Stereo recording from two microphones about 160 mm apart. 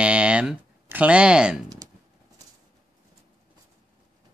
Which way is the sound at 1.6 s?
25° right (ahead or behind).